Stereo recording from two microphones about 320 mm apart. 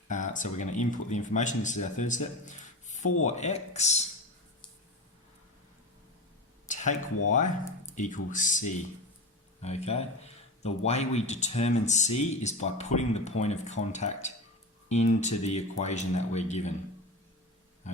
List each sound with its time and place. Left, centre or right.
0.1 s speech: left
2.8 s a sound: left
3.2 s speech: left
6.7 s a sound: left
7.3 s speech: left
17.8 s pig: left